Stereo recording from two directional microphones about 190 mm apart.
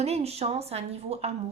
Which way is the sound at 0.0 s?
35° right (ahead or behind).